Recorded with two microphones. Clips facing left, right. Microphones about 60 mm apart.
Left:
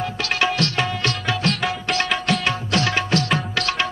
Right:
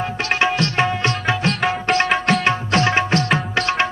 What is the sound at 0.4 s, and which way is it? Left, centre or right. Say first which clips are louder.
Music: right 3 dB; right.